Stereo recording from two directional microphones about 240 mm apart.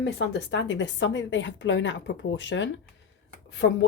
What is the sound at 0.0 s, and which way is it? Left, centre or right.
A woman's voice, left.